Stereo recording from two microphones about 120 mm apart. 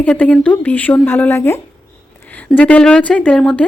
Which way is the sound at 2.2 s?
15° left (ahead or behind).